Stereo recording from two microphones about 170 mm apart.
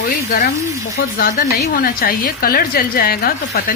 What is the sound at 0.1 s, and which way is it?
A woman's voice, 65° left (ahead or behind).